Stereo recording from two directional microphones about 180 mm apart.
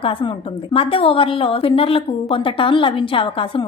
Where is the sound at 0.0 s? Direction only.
30° left (ahead or behind).